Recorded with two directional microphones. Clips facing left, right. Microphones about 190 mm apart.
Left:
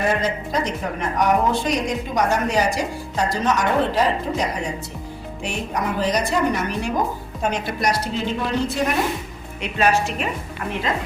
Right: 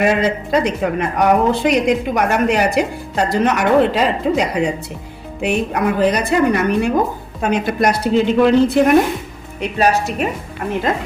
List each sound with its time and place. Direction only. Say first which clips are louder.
0.0 s speech: right 6 dB; 85° right
5.4 s speech: right 8 dB; 60° right (ahead or behind)
9.7 s a woman's voice: right 3 dB; 40° right (ahead or behind)